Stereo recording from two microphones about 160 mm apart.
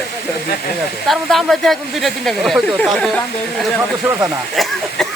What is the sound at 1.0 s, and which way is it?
Speech, centre (ahead or behind).